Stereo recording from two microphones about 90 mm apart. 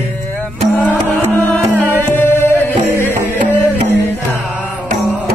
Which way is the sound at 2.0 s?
25° left (ahead or behind).